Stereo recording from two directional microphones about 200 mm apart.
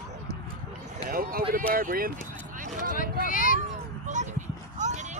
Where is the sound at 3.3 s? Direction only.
45° left (ahead or behind).